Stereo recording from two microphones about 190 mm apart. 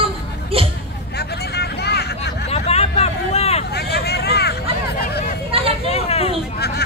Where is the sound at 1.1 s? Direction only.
60° left (ahead or behind).